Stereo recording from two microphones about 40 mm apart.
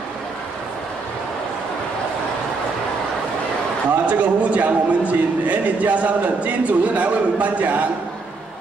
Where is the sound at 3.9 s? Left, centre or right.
Right.